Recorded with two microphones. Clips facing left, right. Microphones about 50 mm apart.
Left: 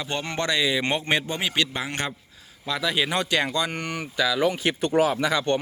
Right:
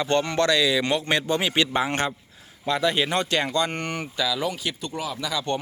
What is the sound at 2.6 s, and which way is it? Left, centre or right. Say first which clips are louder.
Speech: right 2 dB; centre.